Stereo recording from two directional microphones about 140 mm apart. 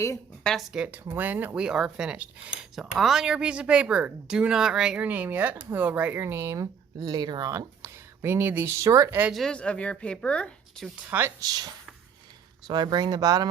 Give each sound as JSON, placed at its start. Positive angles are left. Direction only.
{"t": 0.4, "sound": "speech", "side_deg": 0}
{"t": 9.3, "sound": "speech", "side_deg": 5}
{"t": 10.9, "sound": "speech", "side_deg": -10}